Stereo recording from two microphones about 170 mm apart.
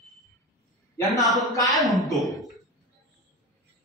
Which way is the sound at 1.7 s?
Centre (ahead or behind).